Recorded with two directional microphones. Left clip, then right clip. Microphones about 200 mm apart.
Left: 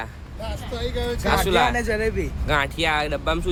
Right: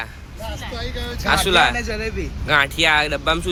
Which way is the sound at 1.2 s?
Centre (ahead or behind).